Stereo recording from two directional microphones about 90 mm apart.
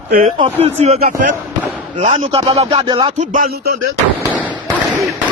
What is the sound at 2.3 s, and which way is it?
Music, 90° right.